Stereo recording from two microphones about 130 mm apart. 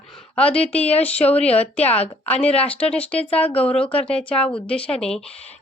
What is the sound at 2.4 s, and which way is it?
Speech, 10° left (ahead or behind).